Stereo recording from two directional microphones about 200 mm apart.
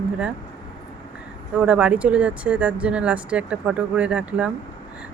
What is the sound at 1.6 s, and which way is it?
Speech, 5° right (ahead or behind).